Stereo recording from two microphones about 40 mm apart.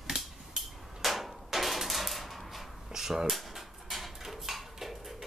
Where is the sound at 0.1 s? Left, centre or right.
Centre.